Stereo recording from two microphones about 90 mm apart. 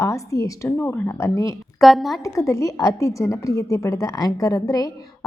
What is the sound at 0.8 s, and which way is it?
Speech, 20° left (ahead or behind).